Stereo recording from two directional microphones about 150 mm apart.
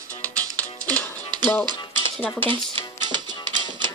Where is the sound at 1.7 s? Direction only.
30° right (ahead or behind).